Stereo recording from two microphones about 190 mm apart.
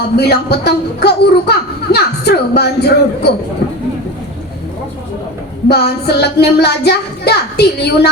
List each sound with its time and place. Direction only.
0.2 s speech: 60° left (ahead or behind)
5.6 s speech: 60° left (ahead or behind)